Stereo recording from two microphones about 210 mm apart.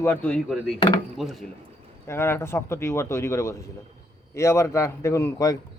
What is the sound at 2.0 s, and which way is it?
A man's voice, 10° left (ahead or behind).